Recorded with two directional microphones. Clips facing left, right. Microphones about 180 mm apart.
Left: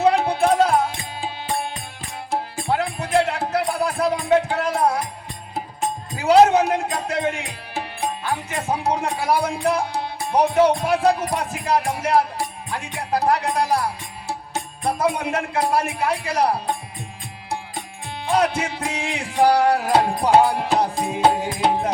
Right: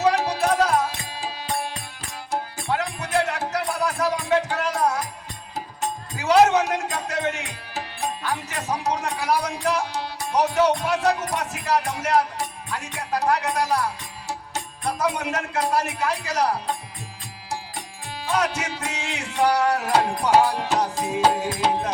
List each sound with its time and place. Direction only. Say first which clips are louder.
0.0 s music: left 3 dB; 30° left (ahead or behind)
2.3 s music: left 3 dB; 30° left (ahead or behind)
6.1 s music: left 3 dB; 30° left (ahead or behind)
18.3 s music: left 4 dB; 30° left (ahead or behind)